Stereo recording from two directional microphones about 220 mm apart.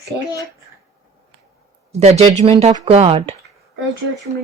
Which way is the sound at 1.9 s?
30° right (ahead or behind).